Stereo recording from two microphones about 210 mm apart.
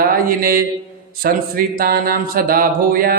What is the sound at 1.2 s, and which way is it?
Speech, 45° right (ahead or behind).